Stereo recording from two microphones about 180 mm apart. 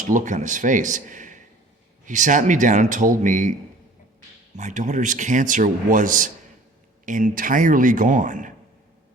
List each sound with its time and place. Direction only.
0.1 s a man's voice: 45° right (ahead or behind)
4.5 s a man's voice: 45° right (ahead or behind)